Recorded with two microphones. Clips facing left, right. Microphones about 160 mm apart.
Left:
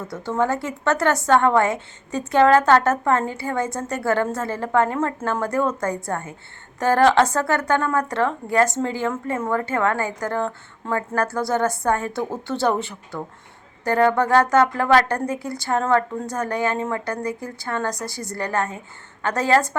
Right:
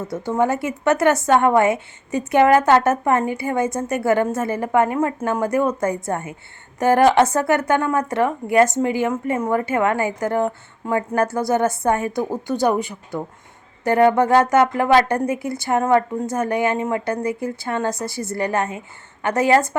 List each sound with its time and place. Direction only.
0.0 s a woman's voice: 20° right (ahead or behind)